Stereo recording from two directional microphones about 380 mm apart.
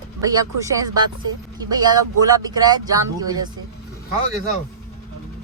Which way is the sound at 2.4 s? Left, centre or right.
Centre.